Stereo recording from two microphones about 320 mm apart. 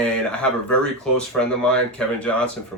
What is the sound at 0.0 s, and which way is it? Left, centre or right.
Speech, centre.